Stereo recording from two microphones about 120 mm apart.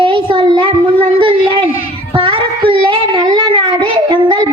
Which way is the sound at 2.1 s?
50° right (ahead or behind).